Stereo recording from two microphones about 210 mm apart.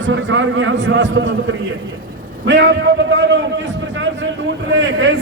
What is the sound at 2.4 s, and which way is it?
Speech, 60° right (ahead or behind).